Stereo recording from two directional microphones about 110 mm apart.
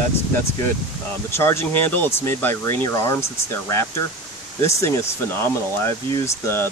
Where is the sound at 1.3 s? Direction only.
20° left (ahead or behind).